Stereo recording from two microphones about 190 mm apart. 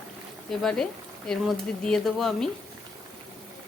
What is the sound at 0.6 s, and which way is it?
Speech, 5° left (ahead or behind).